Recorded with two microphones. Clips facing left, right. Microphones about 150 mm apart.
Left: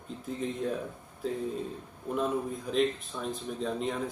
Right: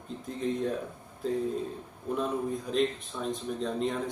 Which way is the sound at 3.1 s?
10° left (ahead or behind).